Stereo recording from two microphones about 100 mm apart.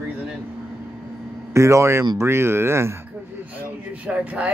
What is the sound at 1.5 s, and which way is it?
Speech, 30° right (ahead or behind).